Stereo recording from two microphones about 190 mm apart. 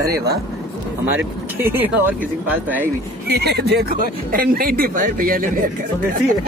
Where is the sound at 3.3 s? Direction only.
60° right (ahead or behind).